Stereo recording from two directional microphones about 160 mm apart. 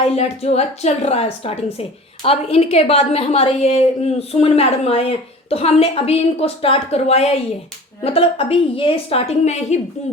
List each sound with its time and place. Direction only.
0.0 s a woman's voice: 40° left (ahead or behind)